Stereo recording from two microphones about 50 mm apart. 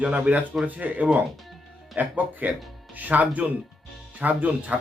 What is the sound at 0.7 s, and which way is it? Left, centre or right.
Speech, right.